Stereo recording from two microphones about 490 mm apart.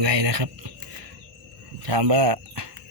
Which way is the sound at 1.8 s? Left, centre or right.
Right.